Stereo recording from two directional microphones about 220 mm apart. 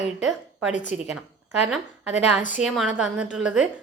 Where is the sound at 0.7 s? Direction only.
35° left (ahead or behind).